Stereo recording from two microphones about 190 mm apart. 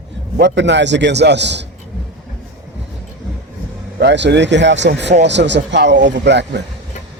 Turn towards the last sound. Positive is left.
turn(degrees=-65)  # may be behind; listen again after turning